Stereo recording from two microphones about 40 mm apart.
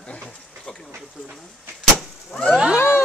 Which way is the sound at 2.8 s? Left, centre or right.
Left.